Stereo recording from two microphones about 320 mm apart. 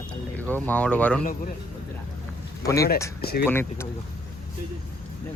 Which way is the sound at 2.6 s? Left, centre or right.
Centre.